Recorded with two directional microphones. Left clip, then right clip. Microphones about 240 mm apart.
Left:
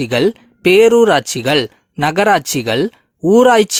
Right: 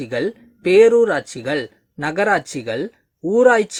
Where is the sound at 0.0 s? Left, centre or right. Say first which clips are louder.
Left 8 dB; left.